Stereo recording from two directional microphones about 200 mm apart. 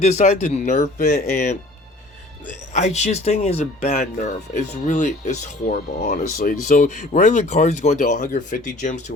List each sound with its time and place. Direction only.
0.0 s speech: 35° left (ahead or behind)
2.7 s speech: 35° left (ahead or behind)